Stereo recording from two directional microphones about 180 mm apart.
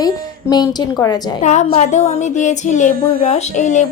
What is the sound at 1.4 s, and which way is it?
Speech, 40° left (ahead or behind).